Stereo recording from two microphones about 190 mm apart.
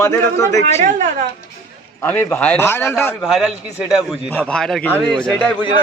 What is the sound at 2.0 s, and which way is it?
A man's voice, 10° left (ahead or behind).